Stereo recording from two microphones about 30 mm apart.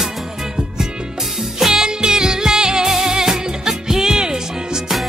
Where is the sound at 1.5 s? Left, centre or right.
Centre.